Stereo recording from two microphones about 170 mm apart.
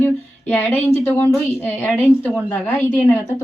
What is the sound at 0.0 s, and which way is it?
A woman's voice, 10° left (ahead or behind).